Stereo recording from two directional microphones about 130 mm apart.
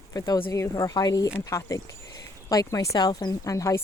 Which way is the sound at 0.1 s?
30° left (ahead or behind).